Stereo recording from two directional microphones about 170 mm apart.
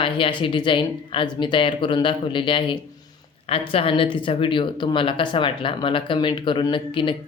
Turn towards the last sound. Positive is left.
turn(degrees=30)  # may be behind; listen again after turning